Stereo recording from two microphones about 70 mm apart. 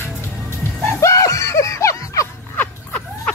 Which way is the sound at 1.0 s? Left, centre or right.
Left.